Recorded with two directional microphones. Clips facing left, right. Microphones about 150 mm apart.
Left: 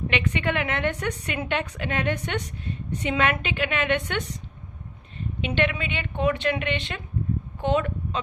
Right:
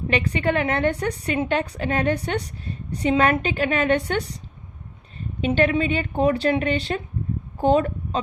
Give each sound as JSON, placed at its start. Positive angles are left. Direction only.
{"t": 0.1, "sound": "a woman's voice", "side_deg": -35}
{"t": 5.5, "sound": "a woman's voice", "side_deg": -35}